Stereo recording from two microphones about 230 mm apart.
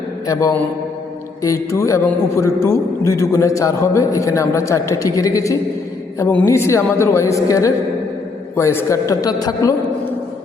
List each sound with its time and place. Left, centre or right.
0.3 s a man's voice: centre